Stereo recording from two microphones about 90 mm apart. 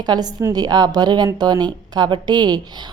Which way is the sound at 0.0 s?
50° right (ahead or behind).